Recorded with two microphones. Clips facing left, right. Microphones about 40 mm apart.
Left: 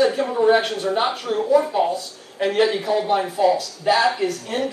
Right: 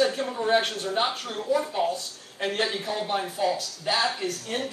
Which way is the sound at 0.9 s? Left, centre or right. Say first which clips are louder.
Left 7 dB; centre.